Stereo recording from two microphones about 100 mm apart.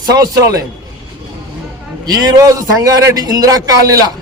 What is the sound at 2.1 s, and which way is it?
A man's voice, 35° right (ahead or behind).